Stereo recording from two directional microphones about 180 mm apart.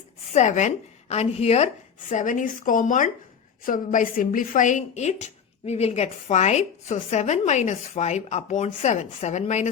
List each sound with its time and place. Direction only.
0.3 s a woman's voice: 40° left (ahead or behind)